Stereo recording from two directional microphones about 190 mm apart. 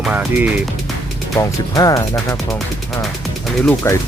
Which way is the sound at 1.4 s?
20° left (ahead or behind).